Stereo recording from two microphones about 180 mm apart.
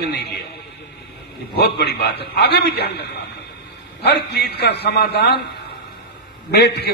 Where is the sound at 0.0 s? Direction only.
60° left (ahead or behind).